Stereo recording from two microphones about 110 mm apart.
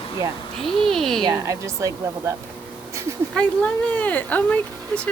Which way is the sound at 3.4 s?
10° left (ahead or behind).